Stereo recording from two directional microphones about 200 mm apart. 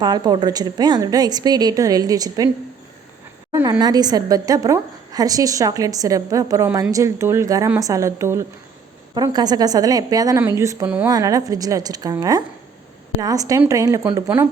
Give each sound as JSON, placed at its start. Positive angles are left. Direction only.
{"t": 0.0, "sound": "a woman's voice", "side_deg": -20}
{"t": 3.5, "sound": "a woman's voice", "side_deg": -15}